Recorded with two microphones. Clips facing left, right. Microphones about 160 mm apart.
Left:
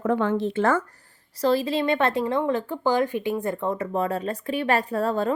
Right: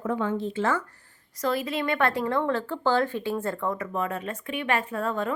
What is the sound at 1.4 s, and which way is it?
A woman's voice, 30° left (ahead or behind).